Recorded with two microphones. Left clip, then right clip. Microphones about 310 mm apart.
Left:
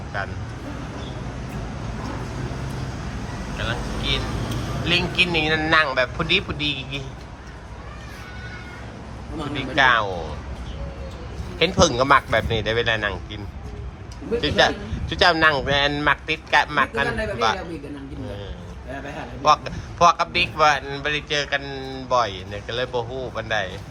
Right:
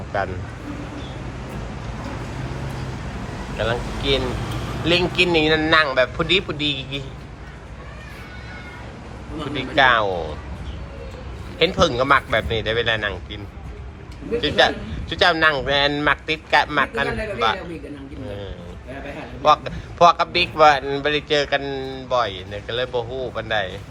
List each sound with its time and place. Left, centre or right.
0.1 s speech: centre
3.6 s a man's voice: centre
9.5 s a man's voice: centre
11.6 s a man's voice: centre
14.4 s a man's voice: centre
19.4 s a man's voice: centre